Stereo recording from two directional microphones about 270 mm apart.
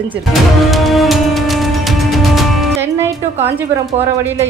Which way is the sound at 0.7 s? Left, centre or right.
Centre.